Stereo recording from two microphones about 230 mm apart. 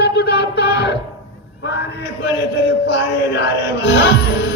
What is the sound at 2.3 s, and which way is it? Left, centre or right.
Music, left.